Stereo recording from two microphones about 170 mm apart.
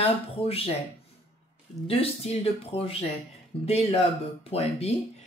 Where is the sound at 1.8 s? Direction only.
35° left (ahead or behind).